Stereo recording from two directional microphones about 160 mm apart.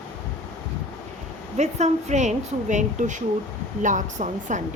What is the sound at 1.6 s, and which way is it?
Speech, 45° right (ahead or behind).